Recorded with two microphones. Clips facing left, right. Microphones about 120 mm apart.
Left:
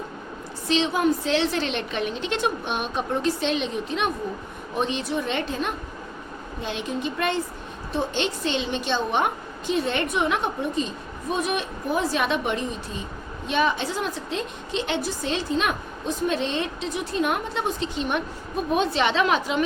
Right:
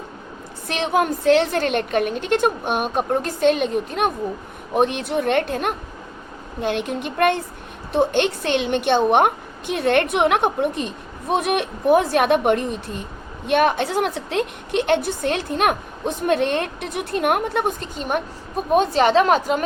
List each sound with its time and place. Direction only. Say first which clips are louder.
0.7 s a woman's voice: right 1 dB; 55° right (ahead or behind)